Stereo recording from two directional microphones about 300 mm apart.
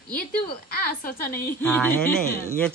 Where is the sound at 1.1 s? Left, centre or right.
Left.